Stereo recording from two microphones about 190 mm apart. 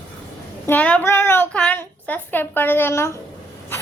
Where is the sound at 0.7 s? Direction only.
5° left (ahead or behind).